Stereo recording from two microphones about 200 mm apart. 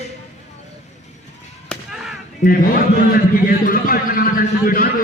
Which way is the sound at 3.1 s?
45° left (ahead or behind).